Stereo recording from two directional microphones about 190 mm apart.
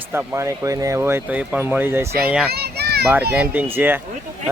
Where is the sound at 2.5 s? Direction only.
55° right (ahead or behind).